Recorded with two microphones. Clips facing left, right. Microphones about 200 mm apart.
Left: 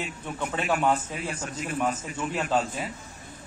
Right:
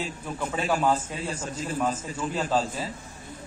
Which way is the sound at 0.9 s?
30° right (ahead or behind).